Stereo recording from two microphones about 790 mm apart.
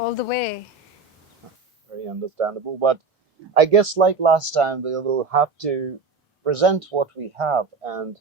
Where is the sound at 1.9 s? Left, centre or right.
Right.